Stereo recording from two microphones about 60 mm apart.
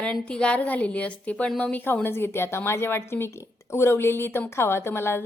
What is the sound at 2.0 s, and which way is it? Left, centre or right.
A woman's voice, left.